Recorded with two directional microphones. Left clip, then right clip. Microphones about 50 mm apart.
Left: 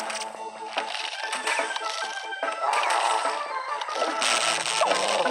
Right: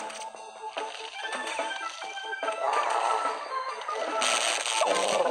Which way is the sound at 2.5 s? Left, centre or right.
Left.